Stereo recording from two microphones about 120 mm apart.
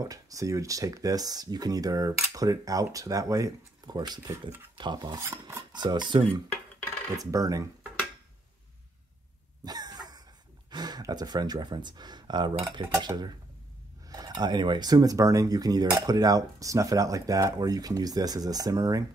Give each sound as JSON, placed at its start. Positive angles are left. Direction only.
{"t": 0.0, "sound": "speech", "side_deg": -30}
{"t": 5.2, "sound": "speech", "side_deg": -20}
{"t": 5.7, "sound": "speech", "side_deg": -35}
{"t": 7.2, "sound": "speech", "side_deg": -30}
{"t": 9.7, "sound": "cough", "side_deg": -35}
{"t": 10.7, "sound": "speech", "side_deg": -35}